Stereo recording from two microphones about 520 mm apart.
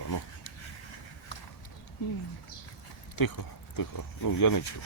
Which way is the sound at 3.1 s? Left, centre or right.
Left.